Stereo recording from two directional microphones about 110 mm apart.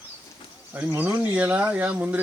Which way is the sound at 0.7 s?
15° right (ahead or behind).